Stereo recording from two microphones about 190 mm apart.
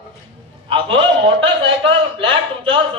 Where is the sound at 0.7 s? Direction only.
30° right (ahead or behind).